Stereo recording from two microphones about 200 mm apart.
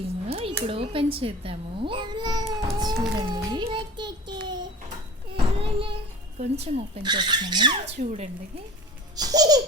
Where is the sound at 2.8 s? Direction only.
20° right (ahead or behind).